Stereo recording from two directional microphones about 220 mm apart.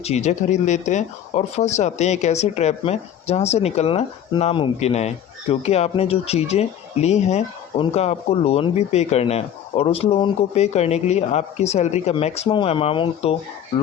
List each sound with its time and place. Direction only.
0.0 s speech: 30° left (ahead or behind)